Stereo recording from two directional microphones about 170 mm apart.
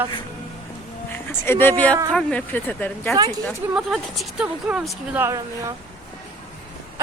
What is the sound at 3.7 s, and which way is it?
Speech, 5° right (ahead or behind).